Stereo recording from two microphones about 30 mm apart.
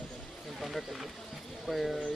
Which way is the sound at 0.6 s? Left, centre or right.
Centre.